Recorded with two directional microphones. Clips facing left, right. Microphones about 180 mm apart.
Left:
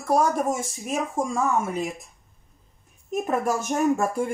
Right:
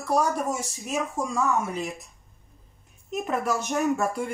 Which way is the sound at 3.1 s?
45° left (ahead or behind).